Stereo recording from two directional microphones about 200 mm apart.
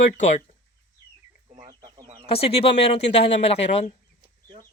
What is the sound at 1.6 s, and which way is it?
Chicken, 25° right (ahead or behind).